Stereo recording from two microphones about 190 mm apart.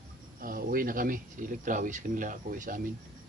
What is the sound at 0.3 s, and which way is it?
Speech, 50° right (ahead or behind).